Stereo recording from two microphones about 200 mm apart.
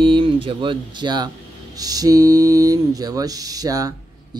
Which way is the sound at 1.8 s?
20° right (ahead or behind).